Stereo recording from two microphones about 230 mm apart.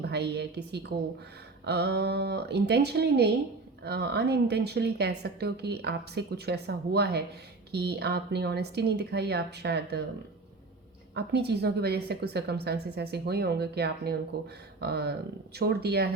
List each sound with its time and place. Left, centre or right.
0.0 s speech: right
11.1 s speech: right